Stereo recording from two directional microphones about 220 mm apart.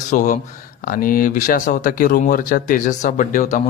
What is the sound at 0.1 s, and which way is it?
Speech, 35° left (ahead or behind).